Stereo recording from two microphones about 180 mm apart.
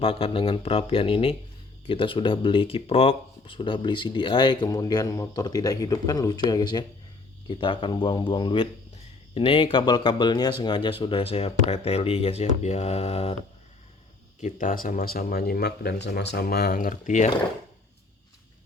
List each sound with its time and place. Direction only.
0.0 s speech: 30° left (ahead or behind)
14.4 s speech: 50° left (ahead or behind)